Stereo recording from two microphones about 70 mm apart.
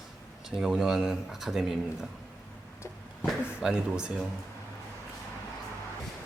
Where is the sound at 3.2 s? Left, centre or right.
Centre.